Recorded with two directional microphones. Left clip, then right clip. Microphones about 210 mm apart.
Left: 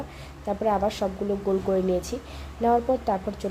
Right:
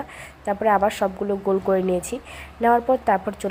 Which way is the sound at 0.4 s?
15° right (ahead or behind).